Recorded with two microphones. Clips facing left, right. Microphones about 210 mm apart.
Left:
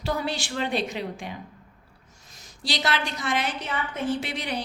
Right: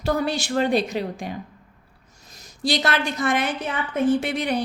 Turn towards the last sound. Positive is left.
turn(degrees=-50)  # may be behind; listen again after turning